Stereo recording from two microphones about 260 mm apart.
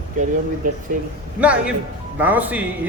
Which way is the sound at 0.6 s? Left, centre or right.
Right.